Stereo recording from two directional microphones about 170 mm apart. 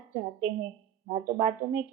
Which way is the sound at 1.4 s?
35° right (ahead or behind).